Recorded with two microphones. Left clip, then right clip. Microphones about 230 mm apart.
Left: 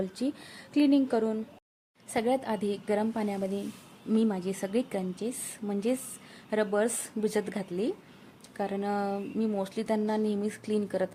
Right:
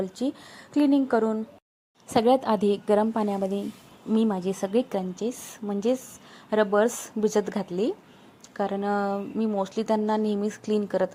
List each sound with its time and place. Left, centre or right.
0.0 s speech: centre